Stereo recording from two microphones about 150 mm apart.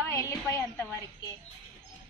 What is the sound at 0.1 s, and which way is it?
A woman's voice, 20° left (ahead or behind).